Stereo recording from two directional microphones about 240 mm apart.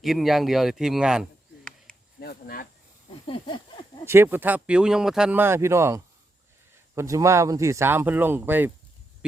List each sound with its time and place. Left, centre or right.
0.0 s speech: centre
2.2 s speech: left
3.2 s a sound: left
4.0 s speech: centre